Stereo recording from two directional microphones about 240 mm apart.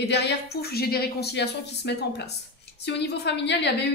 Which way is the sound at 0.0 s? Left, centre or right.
Left.